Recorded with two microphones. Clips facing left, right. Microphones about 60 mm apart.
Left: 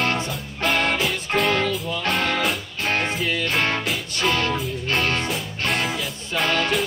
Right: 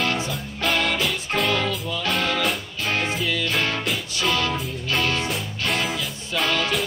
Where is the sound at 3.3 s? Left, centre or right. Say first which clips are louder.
Left 1 dB; left.